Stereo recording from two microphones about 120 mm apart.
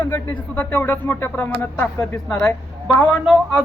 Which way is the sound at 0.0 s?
15° left (ahead or behind).